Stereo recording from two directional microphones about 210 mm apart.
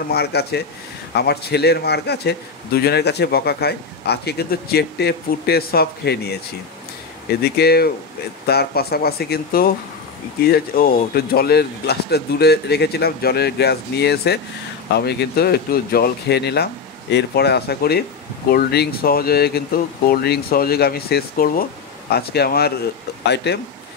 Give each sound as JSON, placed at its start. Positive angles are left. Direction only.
{"t": 0.1, "sound": "a man's voice", "side_deg": 50}